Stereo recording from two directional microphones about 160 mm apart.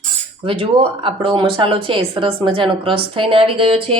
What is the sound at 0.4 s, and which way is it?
A woman's voice, 35° right (ahead or behind).